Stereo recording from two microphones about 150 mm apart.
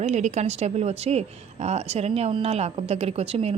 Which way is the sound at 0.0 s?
50° right (ahead or behind).